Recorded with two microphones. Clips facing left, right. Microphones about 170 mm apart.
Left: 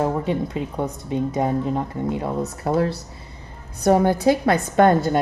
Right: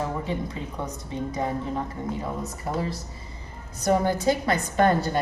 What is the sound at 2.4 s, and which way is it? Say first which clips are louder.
A woman's voice: left 8 dB; 70° left (ahead or behind).